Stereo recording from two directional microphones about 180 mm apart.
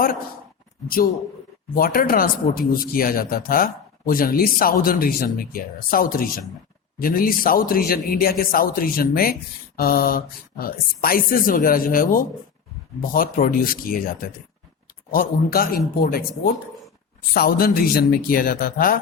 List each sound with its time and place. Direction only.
1.7 s speech: 50° left (ahead or behind)
17.3 s speech: 55° left (ahead or behind)